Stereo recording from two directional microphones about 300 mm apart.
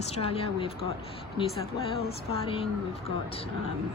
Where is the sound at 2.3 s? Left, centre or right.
Centre.